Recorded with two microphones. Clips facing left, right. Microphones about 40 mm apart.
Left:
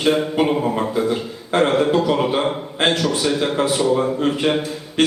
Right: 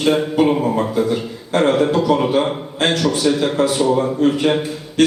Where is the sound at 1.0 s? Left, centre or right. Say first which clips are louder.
Right 2 dB; left.